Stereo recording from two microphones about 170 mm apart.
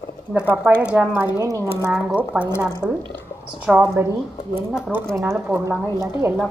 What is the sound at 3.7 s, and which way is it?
A woman's voice, centre (ahead or behind).